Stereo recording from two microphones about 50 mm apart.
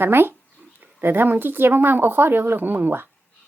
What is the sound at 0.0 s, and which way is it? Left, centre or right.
Speech, right.